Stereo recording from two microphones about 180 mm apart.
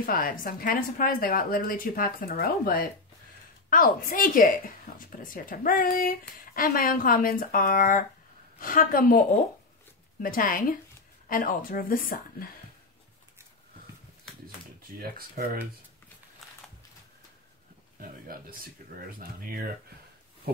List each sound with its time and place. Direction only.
0.0 s speech: 50° left (ahead or behind)
10.2 s speech: 50° left (ahead or behind)
14.8 s speech: 55° right (ahead or behind)
16.4 s a sound: centre (ahead or behind)
18.3 s speech: 55° right (ahead or behind)